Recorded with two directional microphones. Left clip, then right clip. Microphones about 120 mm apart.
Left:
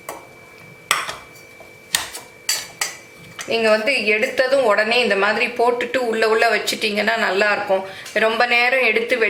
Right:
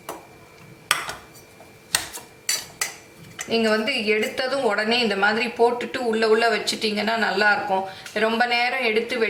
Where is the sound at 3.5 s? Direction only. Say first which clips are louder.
Left 5 dB; 15° left (ahead or behind).